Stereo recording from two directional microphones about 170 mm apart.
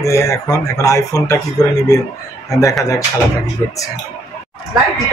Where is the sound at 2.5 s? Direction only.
20° left (ahead or behind).